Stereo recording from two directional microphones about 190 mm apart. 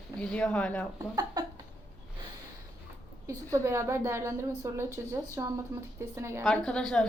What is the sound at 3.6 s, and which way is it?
A woman's voice, 15° right (ahead or behind).